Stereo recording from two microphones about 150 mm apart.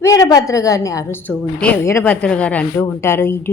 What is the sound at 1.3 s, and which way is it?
A woman's voice, 10° left (ahead or behind).